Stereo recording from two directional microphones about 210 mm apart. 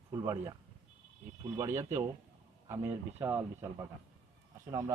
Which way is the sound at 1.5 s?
10° right (ahead or behind).